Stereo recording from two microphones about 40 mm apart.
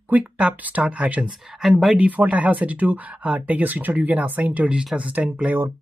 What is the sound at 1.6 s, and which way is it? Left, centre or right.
Speech, centre.